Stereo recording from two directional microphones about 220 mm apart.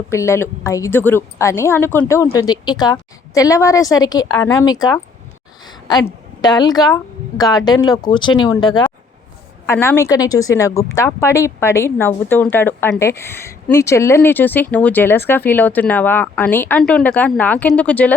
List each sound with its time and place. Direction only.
0.1 s a woman's voice: 10° left (ahead or behind)